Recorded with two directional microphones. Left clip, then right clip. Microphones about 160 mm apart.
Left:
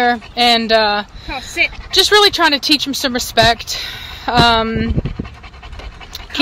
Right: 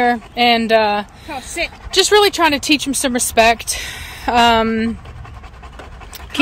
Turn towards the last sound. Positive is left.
turn(degrees=-20)  # may be behind; listen again after turning